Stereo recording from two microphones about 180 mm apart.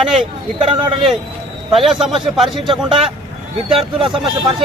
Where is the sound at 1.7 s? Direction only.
Centre (ahead or behind).